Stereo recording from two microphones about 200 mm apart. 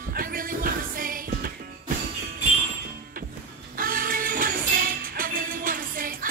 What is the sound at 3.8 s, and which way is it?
Music, 45° right (ahead or behind).